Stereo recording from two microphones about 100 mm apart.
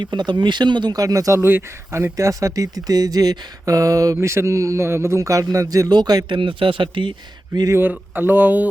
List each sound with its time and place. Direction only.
0.0 s speech: 50° right (ahead or behind)
7.7 s speech: 20° right (ahead or behind)